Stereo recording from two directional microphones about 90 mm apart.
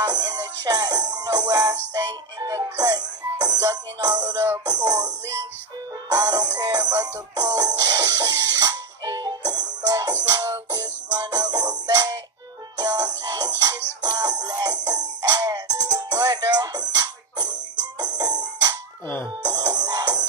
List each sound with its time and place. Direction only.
0.0 s music: 50° right (ahead or behind)
19.4 s music: 50° right (ahead or behind)